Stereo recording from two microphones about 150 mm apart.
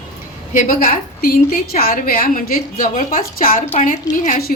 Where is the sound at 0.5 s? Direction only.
65° left (ahead or behind).